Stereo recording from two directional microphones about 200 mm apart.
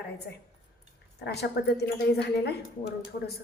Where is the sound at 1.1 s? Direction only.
55° left (ahead or behind).